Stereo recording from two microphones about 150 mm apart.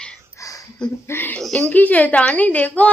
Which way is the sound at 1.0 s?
15° left (ahead or behind).